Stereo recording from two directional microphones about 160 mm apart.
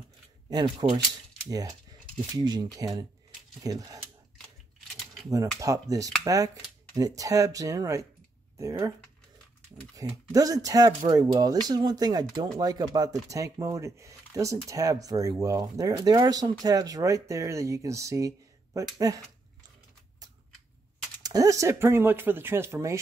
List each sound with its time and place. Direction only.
0.5 s speech: 25° right (ahead or behind)
5.6 s speech: 20° right (ahead or behind)
9.9 s speech: 20° right (ahead or behind)
21.2 s speech: 20° right (ahead or behind)